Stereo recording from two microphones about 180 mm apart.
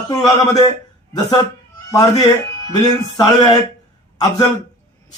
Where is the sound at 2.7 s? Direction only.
25° left (ahead or behind).